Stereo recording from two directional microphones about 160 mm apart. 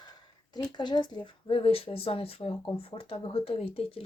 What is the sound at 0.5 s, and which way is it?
Speech, 25° left (ahead or behind).